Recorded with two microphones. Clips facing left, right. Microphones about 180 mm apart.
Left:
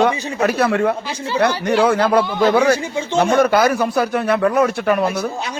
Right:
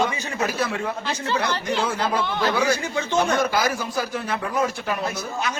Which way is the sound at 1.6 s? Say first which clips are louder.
Left 9 dB; 65° left (ahead or behind).